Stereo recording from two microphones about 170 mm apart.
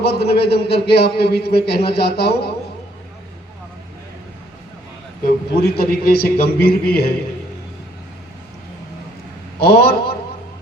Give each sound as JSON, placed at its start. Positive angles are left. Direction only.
{"t": 0.0, "sound": "a man's voice", "side_deg": 70}
{"t": 5.5, "sound": "a man's voice", "side_deg": 65}
{"t": 9.6, "sound": "a man's voice", "side_deg": 65}